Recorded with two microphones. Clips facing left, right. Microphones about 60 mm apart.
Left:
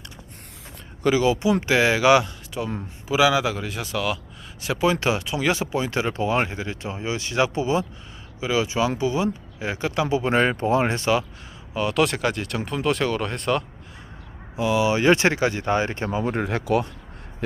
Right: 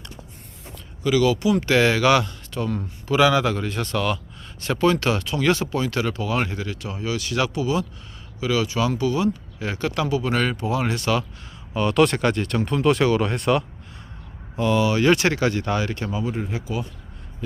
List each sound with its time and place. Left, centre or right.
1.1 s speech: left
1.6 s speech: centre; by 11.1 s left
11.7 s speech: centre
14.5 s speech: centre
14.8 s speech: left
16.2 s speech: left